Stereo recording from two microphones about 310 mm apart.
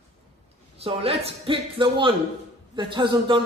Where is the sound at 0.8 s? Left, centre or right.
Centre.